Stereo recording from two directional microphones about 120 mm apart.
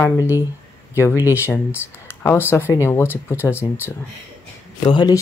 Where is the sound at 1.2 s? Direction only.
20° left (ahead or behind).